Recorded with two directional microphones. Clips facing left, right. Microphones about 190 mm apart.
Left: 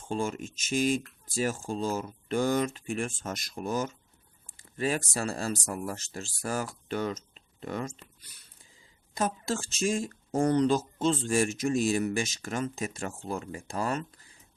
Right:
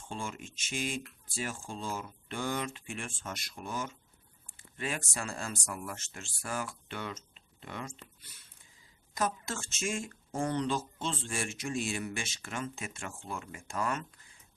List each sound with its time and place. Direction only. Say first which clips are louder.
0.1 s speech: left 9 dB; 40° left (ahead or behind)
9.1 s speech: left 4 dB; 30° left (ahead or behind)